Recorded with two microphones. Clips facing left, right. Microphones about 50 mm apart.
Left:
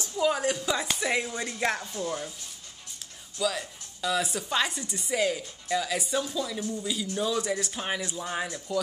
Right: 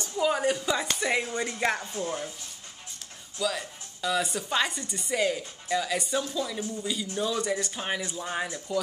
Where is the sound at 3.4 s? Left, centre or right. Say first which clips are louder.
Left 1 dB; centre.